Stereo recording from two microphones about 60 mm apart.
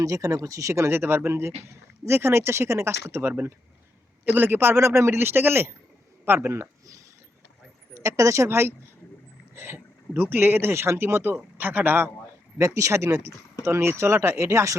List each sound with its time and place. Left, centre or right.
0.0 s speech: right
0.9 s speech: right
6.5 s speech: right
8.4 s speech: right
12.5 s speech: right